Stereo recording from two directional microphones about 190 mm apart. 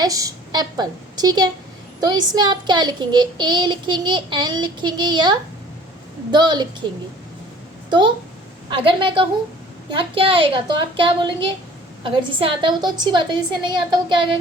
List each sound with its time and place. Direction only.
0.0 s a child's voice: 20° right (ahead or behind)
7.9 s a woman's voice: 25° right (ahead or behind)